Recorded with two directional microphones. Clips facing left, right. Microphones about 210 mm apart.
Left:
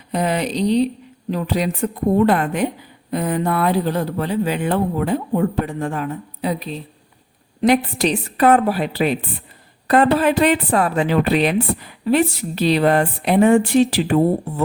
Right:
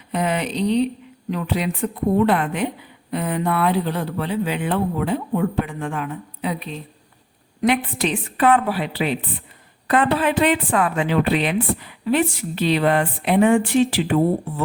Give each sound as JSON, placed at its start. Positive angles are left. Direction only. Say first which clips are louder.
{"t": 0.1, "sound": "a woman's voice", "louder": "left 2 dB", "side_deg": 35}